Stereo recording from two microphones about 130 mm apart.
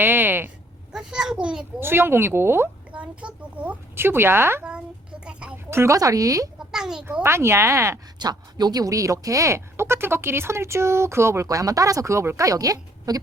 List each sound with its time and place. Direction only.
0.0 s a sound: 15° right (ahead or behind)
0.9 s a child's voice: 5° right (ahead or behind)
5.2 s a sound: 5° right (ahead or behind)
5.7 s speech: 20° right (ahead or behind)
6.7 s a child's voice: 5° right (ahead or behind)
7.2 s speech: 20° right (ahead or behind)
8.2 s speech: 30° right (ahead or behind)